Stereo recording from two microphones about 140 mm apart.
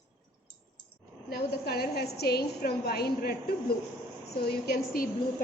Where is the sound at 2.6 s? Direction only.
90° left.